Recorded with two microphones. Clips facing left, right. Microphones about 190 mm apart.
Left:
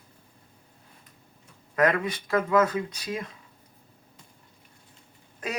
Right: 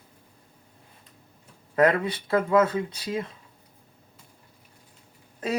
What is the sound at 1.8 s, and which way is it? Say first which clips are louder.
Speech: right 3 dB; 30° right (ahead or behind).